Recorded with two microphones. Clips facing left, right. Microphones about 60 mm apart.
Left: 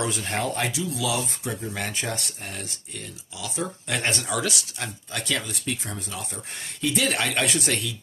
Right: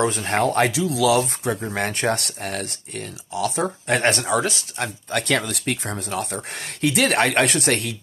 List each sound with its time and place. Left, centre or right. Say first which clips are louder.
0.0 s speech: right 7 dB; right
0.7 s speech: right 8 dB; right
4.4 s speech: right 5 dB; right